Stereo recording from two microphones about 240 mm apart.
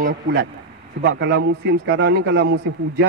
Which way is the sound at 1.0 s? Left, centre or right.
Right.